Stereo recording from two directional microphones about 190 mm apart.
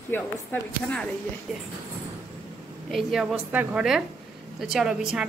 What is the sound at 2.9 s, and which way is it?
A woman's voice, centre (ahead or behind).